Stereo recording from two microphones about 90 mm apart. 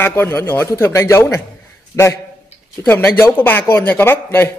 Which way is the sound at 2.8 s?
20° left (ahead or behind).